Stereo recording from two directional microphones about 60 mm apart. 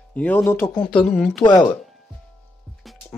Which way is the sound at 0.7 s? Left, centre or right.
Centre.